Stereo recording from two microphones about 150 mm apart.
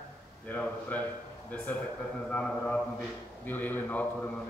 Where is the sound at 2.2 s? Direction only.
10° left (ahead or behind).